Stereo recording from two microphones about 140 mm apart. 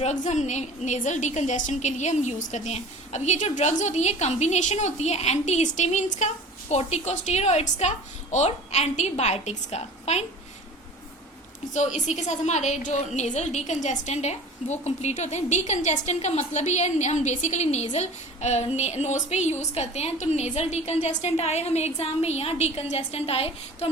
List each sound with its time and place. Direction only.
0.0 s a woman's voice: 55° left (ahead or behind)
11.7 s a woman's voice: 60° left (ahead or behind)